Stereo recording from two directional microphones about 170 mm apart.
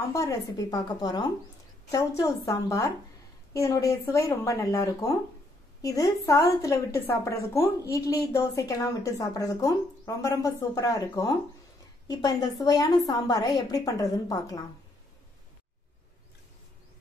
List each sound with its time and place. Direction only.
0.1 s a woman's voice: 20° left (ahead or behind)